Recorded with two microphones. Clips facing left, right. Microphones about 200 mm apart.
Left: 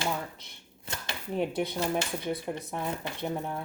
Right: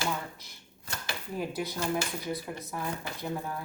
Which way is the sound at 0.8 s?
25° left (ahead or behind).